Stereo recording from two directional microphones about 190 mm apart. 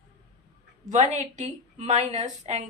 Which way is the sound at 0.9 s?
40° right (ahead or behind).